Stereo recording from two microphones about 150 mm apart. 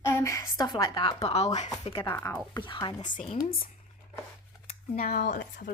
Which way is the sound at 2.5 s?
30° left (ahead or behind).